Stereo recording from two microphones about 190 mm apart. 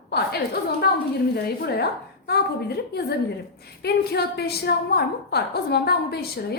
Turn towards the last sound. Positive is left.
turn(degrees=55)  # may be behind; listen again after turning